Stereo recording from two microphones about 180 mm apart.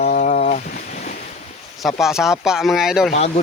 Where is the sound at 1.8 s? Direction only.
Centre (ahead or behind).